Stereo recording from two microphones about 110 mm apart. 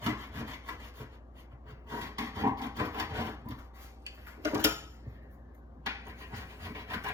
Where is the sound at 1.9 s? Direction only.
25° right (ahead or behind).